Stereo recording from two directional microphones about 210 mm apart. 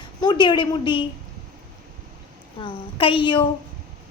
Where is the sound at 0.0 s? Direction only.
20° left (ahead or behind).